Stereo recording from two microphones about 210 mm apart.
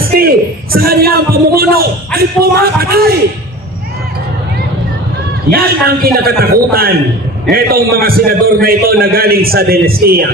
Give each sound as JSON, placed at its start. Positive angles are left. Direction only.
{"t": 0.2, "sound": "a man's voice", "side_deg": -45}
{"t": 5.6, "sound": "a man's voice", "side_deg": -45}